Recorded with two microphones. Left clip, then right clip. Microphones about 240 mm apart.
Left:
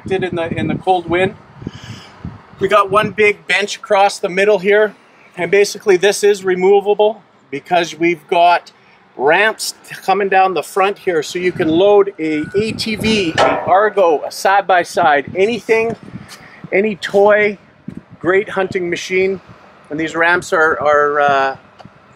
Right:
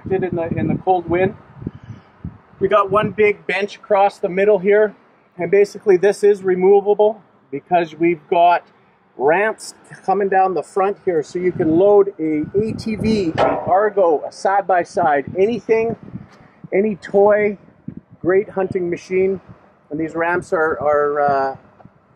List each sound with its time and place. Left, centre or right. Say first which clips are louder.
0.1 s speech: left 2 dB; centre
2.6 s speech: left 3 dB; centre
6.8 s speech: left 2 dB; right
7.5 s speech: left 2 dB; centre